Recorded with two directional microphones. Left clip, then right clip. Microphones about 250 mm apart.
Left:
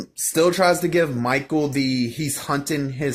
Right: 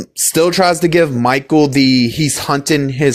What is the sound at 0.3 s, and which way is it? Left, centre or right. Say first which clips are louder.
Speech: right 5 dB; right.